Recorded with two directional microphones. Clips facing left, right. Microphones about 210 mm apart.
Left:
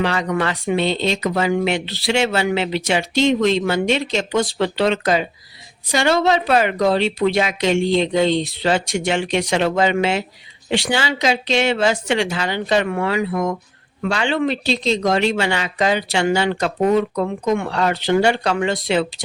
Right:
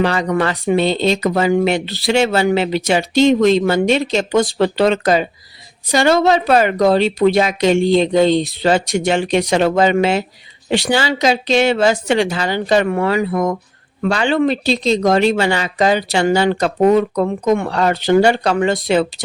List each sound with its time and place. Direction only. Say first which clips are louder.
0.0 s speech: right 4 dB; 40° right (ahead or behind)